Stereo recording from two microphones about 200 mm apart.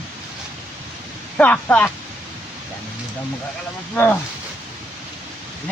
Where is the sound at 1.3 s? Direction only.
5° left (ahead or behind).